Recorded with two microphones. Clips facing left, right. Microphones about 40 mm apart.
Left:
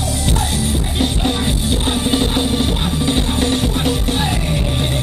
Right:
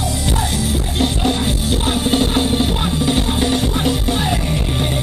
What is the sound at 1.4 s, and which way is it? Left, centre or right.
Music, centre.